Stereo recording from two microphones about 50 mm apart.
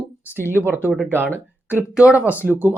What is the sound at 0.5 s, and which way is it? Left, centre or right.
Speech, right.